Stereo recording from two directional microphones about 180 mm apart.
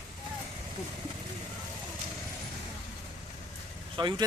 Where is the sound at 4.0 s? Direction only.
25° right (ahead or behind).